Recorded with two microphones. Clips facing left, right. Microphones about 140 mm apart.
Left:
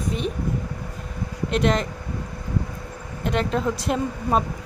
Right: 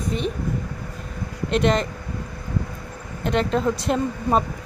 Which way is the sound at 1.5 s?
Centre (ahead or behind).